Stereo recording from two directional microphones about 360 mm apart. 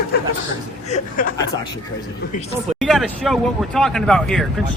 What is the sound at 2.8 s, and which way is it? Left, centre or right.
Speech, centre.